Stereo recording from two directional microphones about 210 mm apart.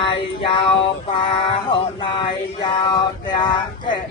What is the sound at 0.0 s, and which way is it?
Music, 25° left (ahead or behind).